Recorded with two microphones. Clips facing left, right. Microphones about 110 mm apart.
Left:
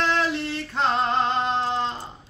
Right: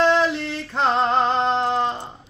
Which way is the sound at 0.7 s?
30° right (ahead or behind).